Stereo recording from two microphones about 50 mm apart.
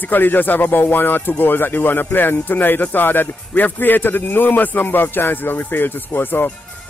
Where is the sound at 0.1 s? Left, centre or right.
Left.